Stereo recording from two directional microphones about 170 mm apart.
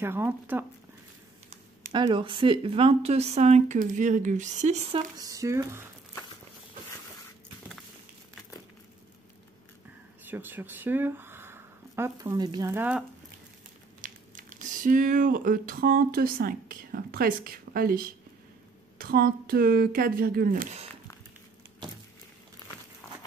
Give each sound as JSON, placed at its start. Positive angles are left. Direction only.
{"t": 0.0, "sound": "speech", "side_deg": -15}
{"t": 1.9, "sound": "speech", "side_deg": -25}
{"t": 5.1, "sound": "speech", "side_deg": -20}
{"t": 10.2, "sound": "speech", "side_deg": -10}
{"t": 14.0, "sound": "speech", "side_deg": -50}